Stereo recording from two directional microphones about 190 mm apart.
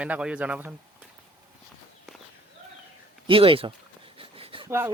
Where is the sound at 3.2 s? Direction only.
30° right (ahead or behind).